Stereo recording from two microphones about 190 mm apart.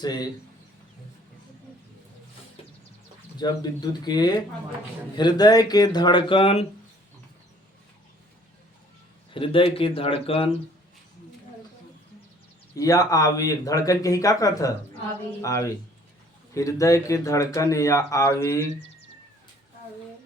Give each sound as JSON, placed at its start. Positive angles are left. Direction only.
{"t": 0.0, "sound": "speech", "side_deg": 20}
{"t": 3.3, "sound": "speech", "side_deg": 20}
{"t": 9.3, "sound": "speech", "side_deg": 30}
{"t": 12.7, "sound": "speech", "side_deg": 20}